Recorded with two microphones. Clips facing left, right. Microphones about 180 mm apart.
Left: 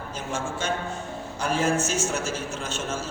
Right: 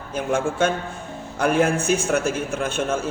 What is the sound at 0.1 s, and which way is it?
A man's voice, 55° right (ahead or behind).